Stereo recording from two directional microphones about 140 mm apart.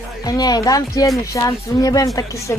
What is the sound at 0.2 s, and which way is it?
Speech, 25° left (ahead or behind).